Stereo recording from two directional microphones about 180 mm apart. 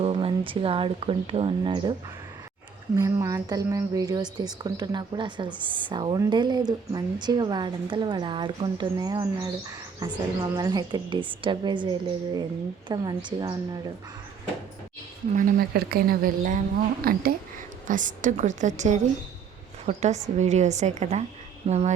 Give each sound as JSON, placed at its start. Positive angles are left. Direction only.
{"t": 0.0, "sound": "speech", "side_deg": -30}
{"t": 2.9, "sound": "speech", "side_deg": -15}
{"t": 15.4, "sound": "a woman's voice", "side_deg": -50}